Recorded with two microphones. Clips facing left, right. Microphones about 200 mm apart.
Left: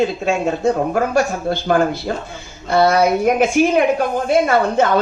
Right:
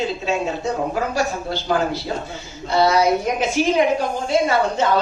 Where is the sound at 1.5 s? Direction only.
55° left (ahead or behind).